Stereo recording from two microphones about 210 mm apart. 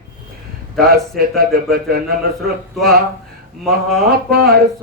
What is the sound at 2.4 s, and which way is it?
Speech, centre (ahead or behind).